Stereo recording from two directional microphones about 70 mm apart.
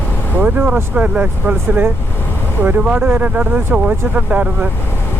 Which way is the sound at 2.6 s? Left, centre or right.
Right.